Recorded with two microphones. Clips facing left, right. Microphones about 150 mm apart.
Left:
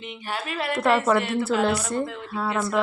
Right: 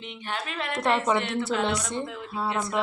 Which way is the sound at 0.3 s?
5° left (ahead or behind).